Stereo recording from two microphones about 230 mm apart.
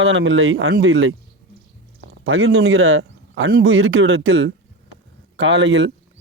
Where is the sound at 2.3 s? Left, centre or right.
Right.